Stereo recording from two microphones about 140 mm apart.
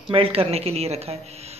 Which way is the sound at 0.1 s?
45° right (ahead or behind).